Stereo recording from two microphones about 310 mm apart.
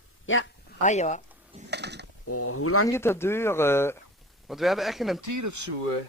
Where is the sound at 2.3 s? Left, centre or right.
Left.